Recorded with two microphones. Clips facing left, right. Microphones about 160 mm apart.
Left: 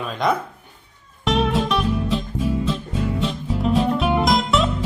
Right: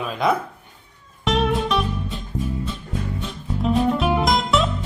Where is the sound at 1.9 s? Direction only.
90° left.